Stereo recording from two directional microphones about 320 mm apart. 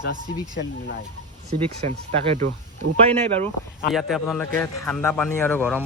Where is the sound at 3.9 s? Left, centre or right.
Centre.